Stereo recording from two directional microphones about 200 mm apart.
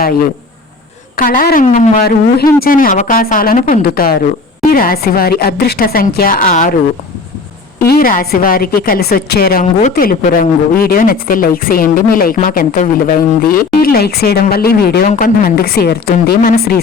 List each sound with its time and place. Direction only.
1.1 s speech: 45° left (ahead or behind)
7.9 s speech: 45° left (ahead or behind)